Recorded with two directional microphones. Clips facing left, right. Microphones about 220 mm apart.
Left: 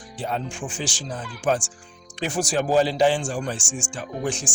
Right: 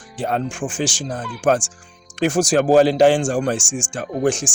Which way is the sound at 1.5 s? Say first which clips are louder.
Right 5 dB; 70° right (ahead or behind).